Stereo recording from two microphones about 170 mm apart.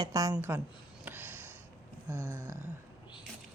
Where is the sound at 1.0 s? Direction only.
10° right (ahead or behind).